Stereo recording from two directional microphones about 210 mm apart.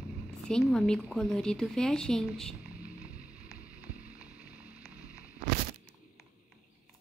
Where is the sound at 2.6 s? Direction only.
45° left (ahead or behind).